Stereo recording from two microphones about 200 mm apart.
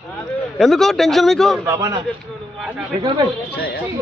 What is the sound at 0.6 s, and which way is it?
Speech, centre (ahead or behind).